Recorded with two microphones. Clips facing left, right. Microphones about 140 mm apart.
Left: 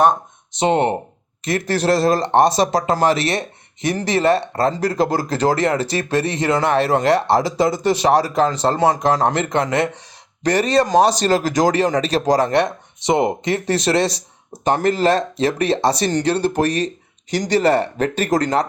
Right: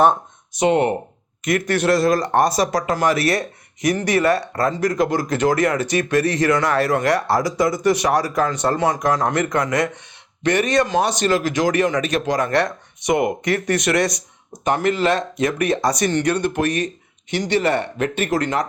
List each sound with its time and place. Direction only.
0.5 s speech: 30° left (ahead or behind)
12.5 s speech: 20° left (ahead or behind); by 18.6 s 40° left (ahead or behind)